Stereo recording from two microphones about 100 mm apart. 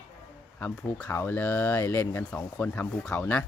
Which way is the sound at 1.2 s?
20° left (ahead or behind).